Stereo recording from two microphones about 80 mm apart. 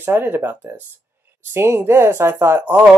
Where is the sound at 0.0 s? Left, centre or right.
Right.